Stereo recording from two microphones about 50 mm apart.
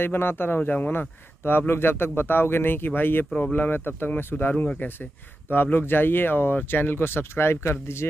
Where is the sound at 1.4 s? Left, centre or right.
Left.